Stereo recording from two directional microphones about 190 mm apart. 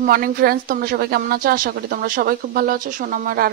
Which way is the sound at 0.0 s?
50° right (ahead or behind).